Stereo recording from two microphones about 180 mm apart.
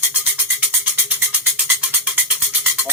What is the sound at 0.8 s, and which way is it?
Music, 10° right (ahead or behind).